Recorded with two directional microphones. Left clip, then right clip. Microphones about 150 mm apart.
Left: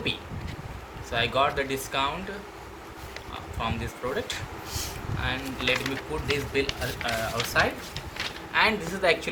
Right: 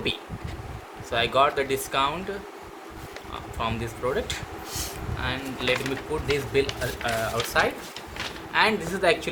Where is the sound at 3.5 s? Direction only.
90° right.